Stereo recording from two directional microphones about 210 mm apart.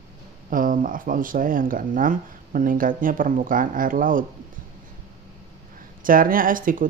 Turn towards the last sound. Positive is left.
turn(degrees=-40)  # may be behind; listen again after turning